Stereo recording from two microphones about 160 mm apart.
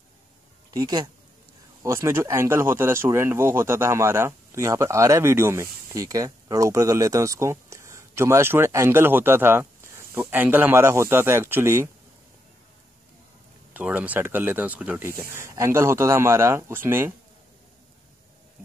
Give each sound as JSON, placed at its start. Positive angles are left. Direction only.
{"t": 0.7, "sound": "speech", "side_deg": -20}
{"t": 13.7, "sound": "speech", "side_deg": -10}